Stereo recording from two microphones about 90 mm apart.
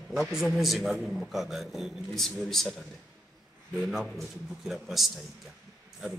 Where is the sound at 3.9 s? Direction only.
5° right (ahead or behind).